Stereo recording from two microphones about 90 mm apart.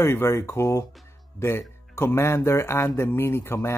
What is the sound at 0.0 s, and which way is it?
Speech, 25° left (ahead or behind).